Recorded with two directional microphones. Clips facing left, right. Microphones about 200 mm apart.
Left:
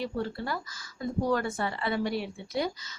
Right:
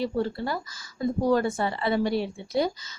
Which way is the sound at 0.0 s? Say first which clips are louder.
Right 5 dB; 30° right (ahead or behind).